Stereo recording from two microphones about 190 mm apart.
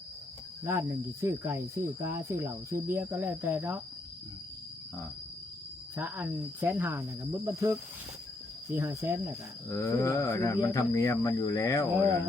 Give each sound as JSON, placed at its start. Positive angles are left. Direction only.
{"t": 0.6, "sound": "speech", "side_deg": -15}
{"t": 6.0, "sound": "speech", "side_deg": -10}
{"t": 9.6, "sound": "speech", "side_deg": 15}